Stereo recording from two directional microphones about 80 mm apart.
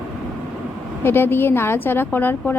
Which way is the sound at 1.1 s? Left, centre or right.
Left.